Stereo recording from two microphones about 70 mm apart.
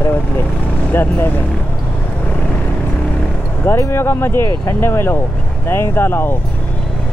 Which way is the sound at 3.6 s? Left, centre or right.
Left.